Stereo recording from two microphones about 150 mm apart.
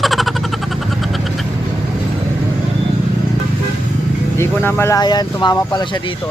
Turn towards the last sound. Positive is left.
turn(degrees=30)  # may be behind; listen again after turning